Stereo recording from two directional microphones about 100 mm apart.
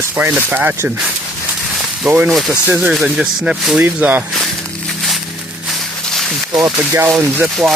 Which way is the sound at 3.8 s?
15° right (ahead or behind).